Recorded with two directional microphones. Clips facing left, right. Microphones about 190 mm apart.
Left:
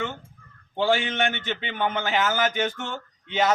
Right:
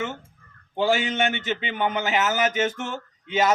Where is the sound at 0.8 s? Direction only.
15° right (ahead or behind).